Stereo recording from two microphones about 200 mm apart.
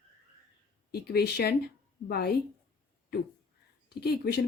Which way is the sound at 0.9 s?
50° left (ahead or behind).